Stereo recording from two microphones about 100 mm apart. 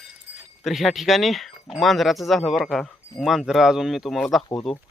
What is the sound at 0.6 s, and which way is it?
Speech, centre (ahead or behind).